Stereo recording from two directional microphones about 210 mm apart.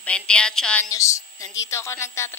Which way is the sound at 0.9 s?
15° left (ahead or behind).